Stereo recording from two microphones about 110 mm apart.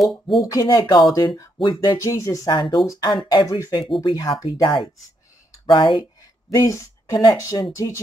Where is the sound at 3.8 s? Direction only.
50° left (ahead or behind).